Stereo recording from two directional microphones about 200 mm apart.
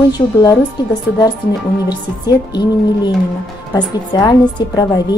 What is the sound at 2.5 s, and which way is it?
A woman's voice, 20° left (ahead or behind).